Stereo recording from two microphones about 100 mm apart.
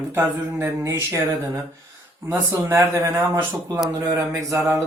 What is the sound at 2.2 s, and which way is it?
Speech, 25° right (ahead or behind).